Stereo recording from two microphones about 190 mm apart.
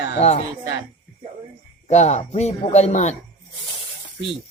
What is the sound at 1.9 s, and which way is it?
Speech, 35° left (ahead or behind).